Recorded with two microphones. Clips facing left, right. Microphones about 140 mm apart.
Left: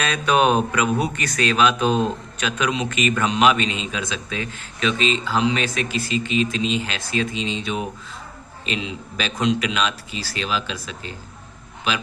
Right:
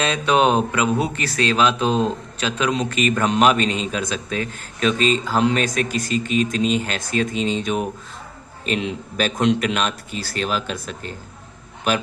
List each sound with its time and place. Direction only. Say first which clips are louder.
0.0 s a man's voice: right 1 dB; 25° right (ahead or behind); by 12.0 s 50° right (ahead or behind)